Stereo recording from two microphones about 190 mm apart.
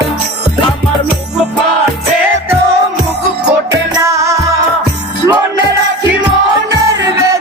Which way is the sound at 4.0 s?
15° right (ahead or behind).